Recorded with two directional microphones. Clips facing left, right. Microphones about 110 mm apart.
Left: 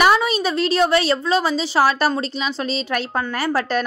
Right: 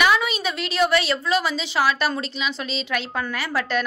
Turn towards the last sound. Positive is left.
turn(degrees=40)  # may be behind; listen again after turning